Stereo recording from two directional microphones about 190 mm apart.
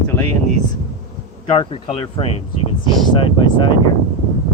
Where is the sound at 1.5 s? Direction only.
30° left (ahead or behind).